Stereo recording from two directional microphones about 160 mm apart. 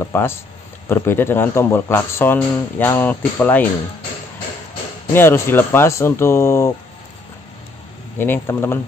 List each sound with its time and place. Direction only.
0.0 s speech: 15° left (ahead or behind)
5.1 s speech: 15° left (ahead or behind)
8.2 s speech: 15° left (ahead or behind)